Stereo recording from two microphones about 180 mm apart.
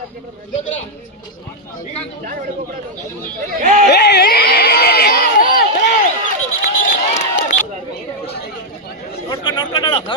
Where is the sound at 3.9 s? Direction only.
65° left (ahead or behind).